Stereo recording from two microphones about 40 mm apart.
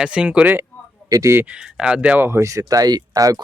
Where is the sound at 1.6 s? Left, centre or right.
Centre.